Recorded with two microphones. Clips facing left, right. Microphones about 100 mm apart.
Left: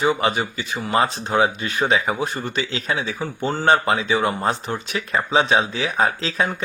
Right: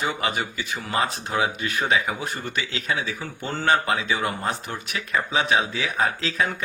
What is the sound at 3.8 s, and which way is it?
Speech, 35° left (ahead or behind).